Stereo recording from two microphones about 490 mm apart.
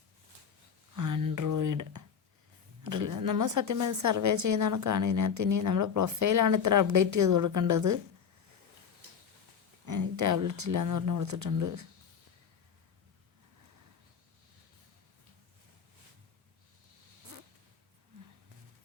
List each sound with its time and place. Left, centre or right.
0.9 s a sound: right
2.8 s a woman's voice: right
9.8 s a woman's voice: right